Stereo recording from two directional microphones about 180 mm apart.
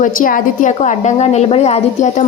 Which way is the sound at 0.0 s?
50° left (ahead or behind).